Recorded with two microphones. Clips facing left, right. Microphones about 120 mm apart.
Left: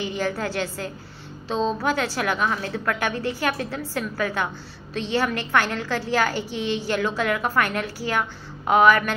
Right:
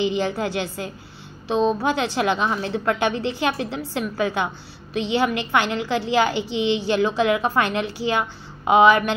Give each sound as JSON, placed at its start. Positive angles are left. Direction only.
{"t": 0.0, "sound": "a woman's voice", "side_deg": -20}